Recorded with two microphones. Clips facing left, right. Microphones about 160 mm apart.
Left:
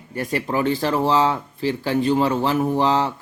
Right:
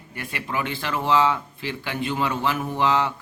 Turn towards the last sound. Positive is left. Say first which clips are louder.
# left 4 dB
turn(degrees=35)  # may be behind; listen again after turning